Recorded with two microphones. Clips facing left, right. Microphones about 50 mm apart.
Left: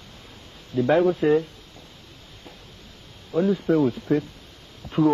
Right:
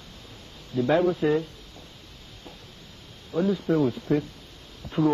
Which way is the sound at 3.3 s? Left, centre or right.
Left.